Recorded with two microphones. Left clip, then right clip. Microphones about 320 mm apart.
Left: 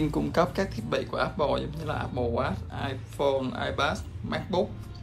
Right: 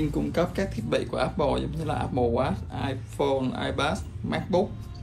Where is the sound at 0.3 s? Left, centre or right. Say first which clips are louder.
Left 1 dB; centre.